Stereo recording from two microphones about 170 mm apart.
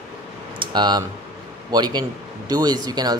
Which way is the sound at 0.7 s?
25° right (ahead or behind).